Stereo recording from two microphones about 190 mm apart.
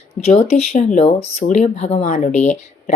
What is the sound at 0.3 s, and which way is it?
Speech, 35° left (ahead or behind).